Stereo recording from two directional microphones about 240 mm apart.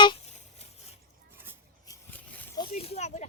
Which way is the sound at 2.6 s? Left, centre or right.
Left.